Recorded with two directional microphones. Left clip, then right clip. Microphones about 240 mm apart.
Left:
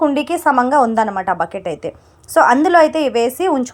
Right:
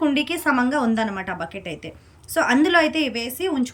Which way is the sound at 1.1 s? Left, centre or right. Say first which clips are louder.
Left 10 dB; left.